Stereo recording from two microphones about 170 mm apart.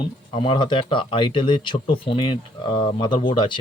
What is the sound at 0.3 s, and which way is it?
Speech, 30° left (ahead or behind).